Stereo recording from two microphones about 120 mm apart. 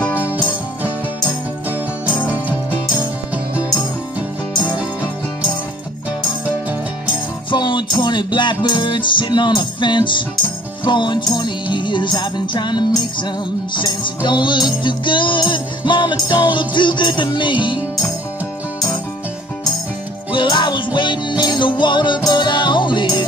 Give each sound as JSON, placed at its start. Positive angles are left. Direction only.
{"t": 0.2, "sound": "music", "side_deg": -10}
{"t": 2.1, "sound": "music", "side_deg": 15}
{"t": 7.5, "sound": "music", "side_deg": 40}
{"t": 20.3, "sound": "music", "side_deg": 40}